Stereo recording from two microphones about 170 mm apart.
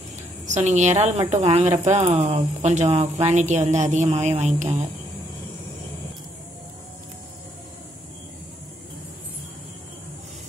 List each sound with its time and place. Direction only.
0.5 s a woman's voice: 45° right (ahead or behind)